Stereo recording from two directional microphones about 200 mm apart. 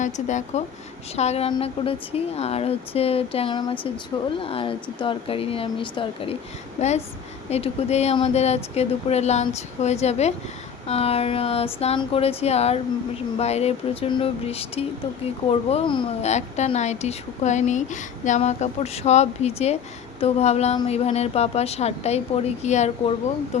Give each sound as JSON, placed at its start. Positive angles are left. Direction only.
{"t": 0.0, "sound": "a woman's voice", "side_deg": 35}